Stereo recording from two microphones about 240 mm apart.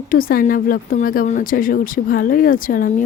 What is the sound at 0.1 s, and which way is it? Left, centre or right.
Speech, left.